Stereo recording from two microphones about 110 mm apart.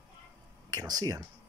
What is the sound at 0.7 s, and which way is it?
Speech, 35° right (ahead or behind).